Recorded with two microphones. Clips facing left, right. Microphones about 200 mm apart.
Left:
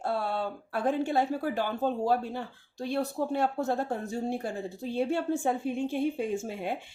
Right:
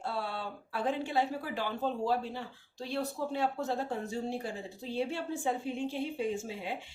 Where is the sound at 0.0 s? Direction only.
50° left (ahead or behind).